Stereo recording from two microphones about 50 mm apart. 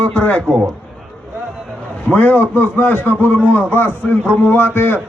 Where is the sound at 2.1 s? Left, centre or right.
Left.